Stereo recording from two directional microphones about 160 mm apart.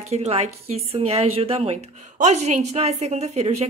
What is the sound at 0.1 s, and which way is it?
A woman's voice, 40° right (ahead or behind).